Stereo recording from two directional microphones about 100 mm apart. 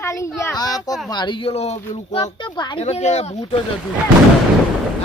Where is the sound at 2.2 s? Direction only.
45° left (ahead or behind).